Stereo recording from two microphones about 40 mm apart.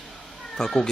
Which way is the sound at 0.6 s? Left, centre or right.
Centre.